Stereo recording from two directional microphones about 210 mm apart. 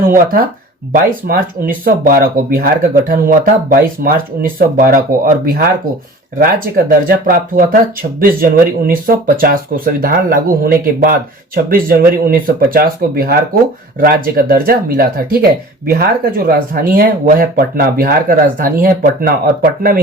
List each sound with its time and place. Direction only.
0.0 s speech: 40° right (ahead or behind)